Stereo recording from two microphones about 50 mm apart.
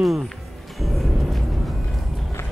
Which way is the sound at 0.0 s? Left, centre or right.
Centre.